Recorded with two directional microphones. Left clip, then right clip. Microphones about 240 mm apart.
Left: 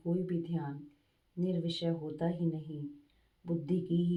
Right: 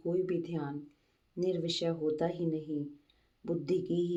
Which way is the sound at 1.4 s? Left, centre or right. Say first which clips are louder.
Right 4 dB; right.